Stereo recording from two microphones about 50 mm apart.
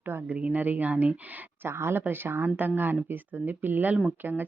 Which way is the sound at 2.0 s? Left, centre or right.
Right.